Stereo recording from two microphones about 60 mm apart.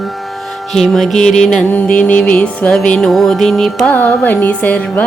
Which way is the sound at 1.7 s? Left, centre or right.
Left.